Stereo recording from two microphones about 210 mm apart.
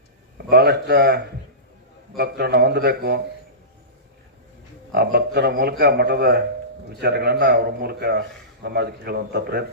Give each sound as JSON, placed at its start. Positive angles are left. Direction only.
{"t": 0.3, "sound": "a man's voice", "side_deg": -50}
{"t": 4.9, "sound": "a man's voice", "side_deg": -55}